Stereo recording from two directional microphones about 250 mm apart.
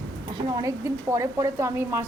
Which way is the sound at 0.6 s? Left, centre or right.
Centre.